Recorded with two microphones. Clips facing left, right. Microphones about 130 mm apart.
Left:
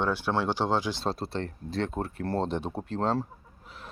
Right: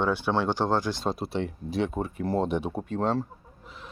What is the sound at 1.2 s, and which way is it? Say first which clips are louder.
Speech: right 3 dB; 10° right (ahead or behind).